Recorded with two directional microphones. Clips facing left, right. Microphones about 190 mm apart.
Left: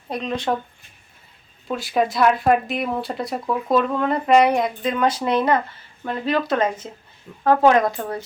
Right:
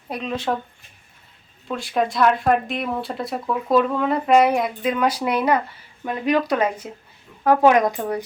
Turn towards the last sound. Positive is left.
turn(degrees=-15)  # may be behind; listen again after turning